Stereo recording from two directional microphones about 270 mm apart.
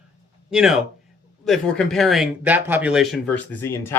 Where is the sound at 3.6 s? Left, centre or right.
Centre.